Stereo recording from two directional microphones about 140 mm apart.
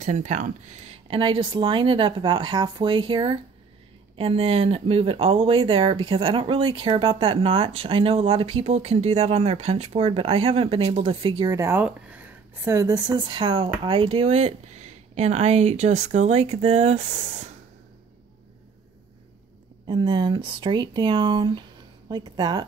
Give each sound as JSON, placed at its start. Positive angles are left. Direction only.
{"t": 0.0, "sound": "speech", "side_deg": -60}
{"t": 1.0, "sound": "speech", "side_deg": -40}
{"t": 11.4, "sound": "speech", "side_deg": -20}
{"t": 19.9, "sound": "speech", "side_deg": -35}